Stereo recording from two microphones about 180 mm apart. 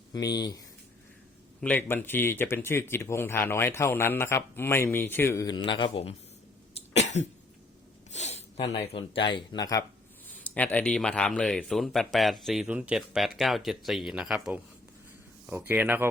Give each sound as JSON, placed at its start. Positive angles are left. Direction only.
{"t": 0.1, "sound": "speech", "side_deg": 20}
{"t": 1.6, "sound": "speech", "side_deg": 10}
{"t": 5.6, "sound": "a man's voice", "side_deg": 30}
{"t": 7.0, "sound": "cough", "side_deg": 40}
{"t": 8.1, "sound": "speech", "side_deg": 35}
{"t": 10.3, "sound": "speech", "side_deg": 10}